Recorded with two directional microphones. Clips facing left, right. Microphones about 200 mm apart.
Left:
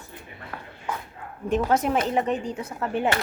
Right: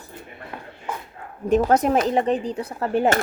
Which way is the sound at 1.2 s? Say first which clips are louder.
Right 1 dB; 40° right (ahead or behind).